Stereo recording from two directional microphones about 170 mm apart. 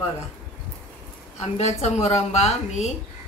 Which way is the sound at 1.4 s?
40° left (ahead or behind).